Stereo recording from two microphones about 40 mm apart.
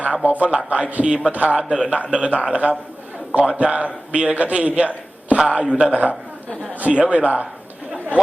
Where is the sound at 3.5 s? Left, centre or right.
Right.